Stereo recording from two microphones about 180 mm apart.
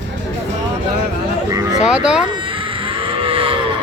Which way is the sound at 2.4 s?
30° right (ahead or behind).